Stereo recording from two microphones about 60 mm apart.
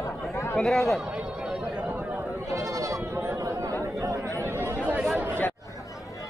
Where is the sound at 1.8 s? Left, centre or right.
Right.